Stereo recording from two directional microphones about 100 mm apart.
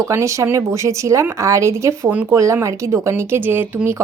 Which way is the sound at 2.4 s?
30° right (ahead or behind).